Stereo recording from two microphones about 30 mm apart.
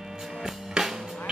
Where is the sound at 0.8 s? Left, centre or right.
Right.